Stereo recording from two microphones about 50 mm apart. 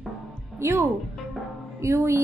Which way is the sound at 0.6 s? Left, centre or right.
Right.